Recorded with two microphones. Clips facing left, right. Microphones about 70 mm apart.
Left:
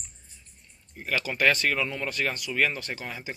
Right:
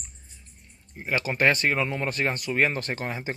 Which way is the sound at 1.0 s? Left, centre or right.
Right.